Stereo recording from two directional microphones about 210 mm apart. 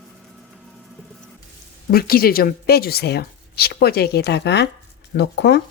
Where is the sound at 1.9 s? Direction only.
45° left (ahead or behind).